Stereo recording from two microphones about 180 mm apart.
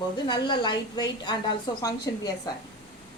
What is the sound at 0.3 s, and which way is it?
A woman's voice, 25° left (ahead or behind).